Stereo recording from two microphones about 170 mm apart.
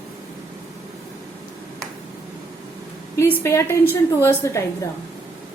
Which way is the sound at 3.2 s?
10° left (ahead or behind).